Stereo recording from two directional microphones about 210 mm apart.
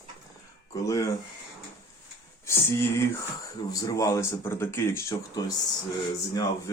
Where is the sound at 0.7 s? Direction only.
15° left (ahead or behind).